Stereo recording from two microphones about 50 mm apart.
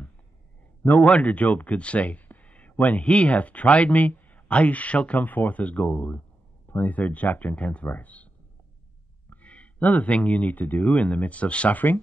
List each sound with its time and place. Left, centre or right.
0.8 s speech: left
9.3 s speech: left